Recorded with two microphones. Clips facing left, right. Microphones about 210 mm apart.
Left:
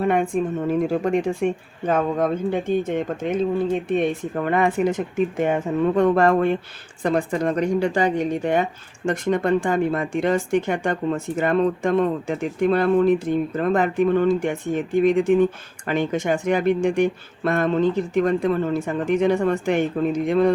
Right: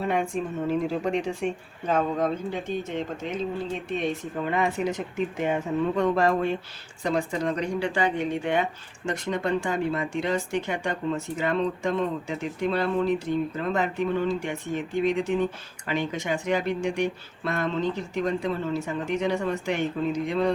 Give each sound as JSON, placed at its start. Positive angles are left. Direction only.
{"t": 0.0, "sound": "speech", "side_deg": 55}